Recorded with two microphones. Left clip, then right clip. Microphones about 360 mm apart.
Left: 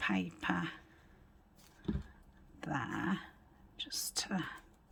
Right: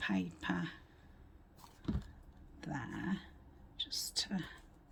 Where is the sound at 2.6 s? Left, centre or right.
Centre.